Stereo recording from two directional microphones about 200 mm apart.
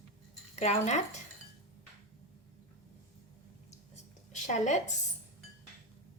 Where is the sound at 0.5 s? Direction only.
35° left (ahead or behind).